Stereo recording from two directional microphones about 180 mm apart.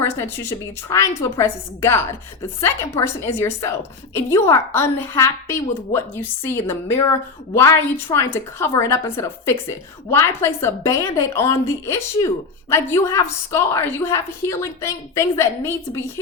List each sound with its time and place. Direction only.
0.0 s a woman's voice: 15° left (ahead or behind)